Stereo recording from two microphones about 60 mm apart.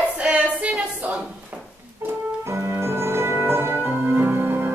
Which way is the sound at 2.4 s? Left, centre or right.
Right.